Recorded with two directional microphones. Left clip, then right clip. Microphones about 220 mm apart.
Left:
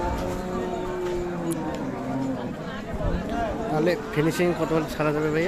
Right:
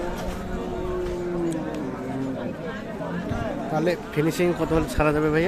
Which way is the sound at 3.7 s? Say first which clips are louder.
Even; 5° right (ahead or behind).